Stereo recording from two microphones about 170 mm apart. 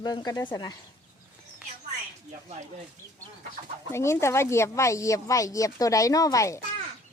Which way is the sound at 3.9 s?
15° left (ahead or behind).